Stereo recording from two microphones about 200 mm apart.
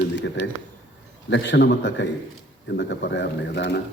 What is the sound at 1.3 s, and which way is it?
A man's voice, 60° left (ahead or behind).